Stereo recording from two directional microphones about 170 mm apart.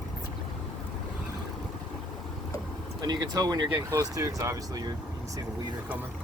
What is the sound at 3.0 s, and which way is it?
Speech, 25° right (ahead or behind).